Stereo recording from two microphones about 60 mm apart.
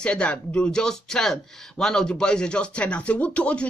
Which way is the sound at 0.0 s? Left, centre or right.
Centre.